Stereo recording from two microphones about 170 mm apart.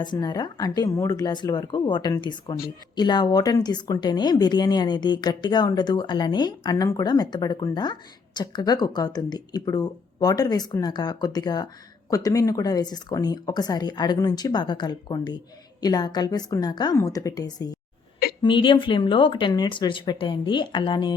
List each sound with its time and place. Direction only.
0.0 s a woman's voice: 25° left (ahead or behind)